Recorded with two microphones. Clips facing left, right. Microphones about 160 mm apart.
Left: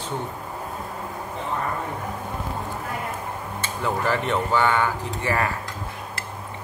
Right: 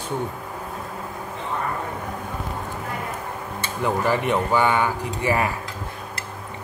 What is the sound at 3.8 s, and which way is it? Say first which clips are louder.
Speech: right 2 dB; 15° right (ahead or behind).